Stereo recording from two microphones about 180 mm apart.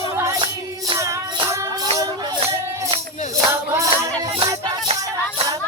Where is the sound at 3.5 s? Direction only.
15° right (ahead or behind).